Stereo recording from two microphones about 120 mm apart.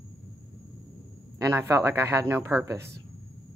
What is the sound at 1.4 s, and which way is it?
Speech, 25° right (ahead or behind).